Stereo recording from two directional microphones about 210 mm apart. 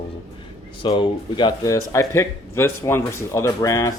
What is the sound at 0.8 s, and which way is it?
Speech, 20° left (ahead or behind).